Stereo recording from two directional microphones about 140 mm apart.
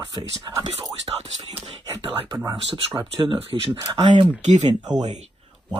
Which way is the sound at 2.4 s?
35° right (ahead or behind).